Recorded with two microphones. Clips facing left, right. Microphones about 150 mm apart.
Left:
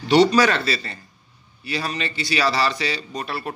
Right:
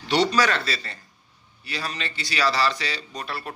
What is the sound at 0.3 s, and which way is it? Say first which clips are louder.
A man's voice: left 4 dB; 15° left (ahead or behind).